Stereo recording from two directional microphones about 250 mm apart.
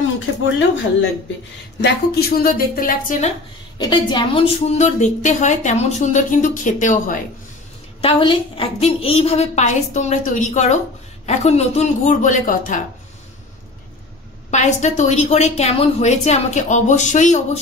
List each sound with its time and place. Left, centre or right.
1.8 s a woman's voice: left
3.7 s a woman's voice: centre
8.0 s a woman's voice: centre
14.5 s a woman's voice: left